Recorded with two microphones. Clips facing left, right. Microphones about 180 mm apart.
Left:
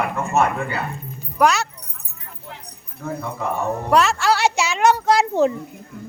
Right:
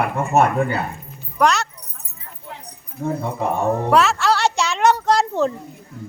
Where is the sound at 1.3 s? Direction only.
5° left (ahead or behind).